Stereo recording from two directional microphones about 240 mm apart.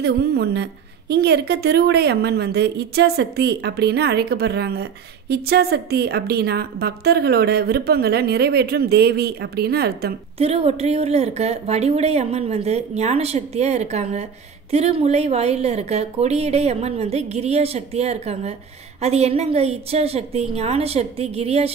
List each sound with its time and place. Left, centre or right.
0.0 s a woman's voice: right
10.4 s a woman's voice: right